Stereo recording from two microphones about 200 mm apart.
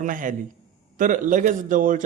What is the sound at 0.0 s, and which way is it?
A man's voice, 40° right (ahead or behind).